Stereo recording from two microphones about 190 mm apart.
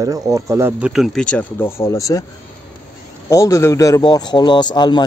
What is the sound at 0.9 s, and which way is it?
Speech, centre (ahead or behind).